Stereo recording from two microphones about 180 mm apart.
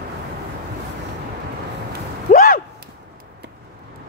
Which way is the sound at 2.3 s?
50° left (ahead or behind).